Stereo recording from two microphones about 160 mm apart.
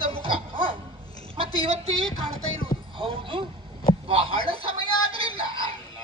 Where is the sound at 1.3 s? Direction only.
35° right (ahead or behind).